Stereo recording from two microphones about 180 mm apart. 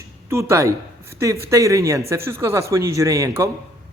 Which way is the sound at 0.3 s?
15° right (ahead or behind).